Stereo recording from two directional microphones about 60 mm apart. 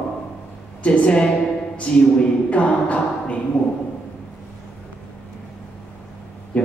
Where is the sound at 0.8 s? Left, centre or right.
Left.